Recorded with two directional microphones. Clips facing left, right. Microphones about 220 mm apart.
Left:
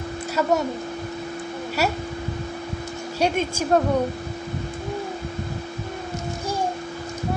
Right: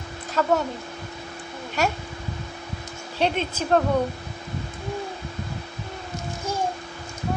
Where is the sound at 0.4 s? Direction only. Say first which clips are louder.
Even; 5° left (ahead or behind).